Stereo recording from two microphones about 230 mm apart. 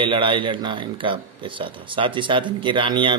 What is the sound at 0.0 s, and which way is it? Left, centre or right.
Speech, right.